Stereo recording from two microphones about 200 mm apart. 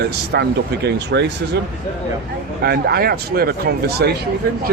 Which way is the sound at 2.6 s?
50° right (ahead or behind).